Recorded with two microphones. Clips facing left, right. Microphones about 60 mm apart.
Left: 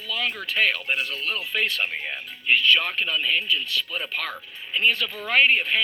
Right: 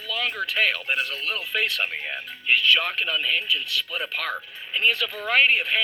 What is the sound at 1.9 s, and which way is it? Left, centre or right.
Speech, centre.